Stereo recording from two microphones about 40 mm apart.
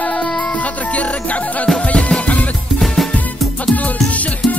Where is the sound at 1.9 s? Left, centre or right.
Left.